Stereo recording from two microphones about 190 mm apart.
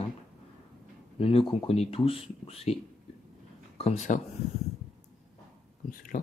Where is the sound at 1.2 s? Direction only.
30° left (ahead or behind).